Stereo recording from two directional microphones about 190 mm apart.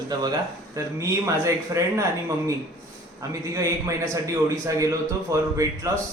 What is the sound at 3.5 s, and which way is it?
A man's voice, 15° right (ahead or behind).